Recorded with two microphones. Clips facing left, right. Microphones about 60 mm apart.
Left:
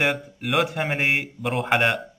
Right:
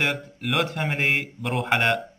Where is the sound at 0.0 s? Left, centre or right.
Centre.